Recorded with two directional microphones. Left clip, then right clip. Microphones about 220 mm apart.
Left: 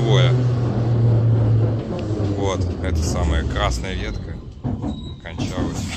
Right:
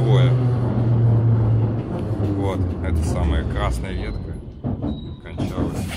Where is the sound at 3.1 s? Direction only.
Centre (ahead or behind).